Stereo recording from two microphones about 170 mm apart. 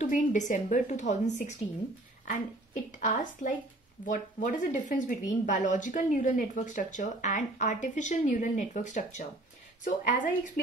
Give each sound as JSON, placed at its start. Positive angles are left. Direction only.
{"t": 0.0, "sound": "speech", "side_deg": 45}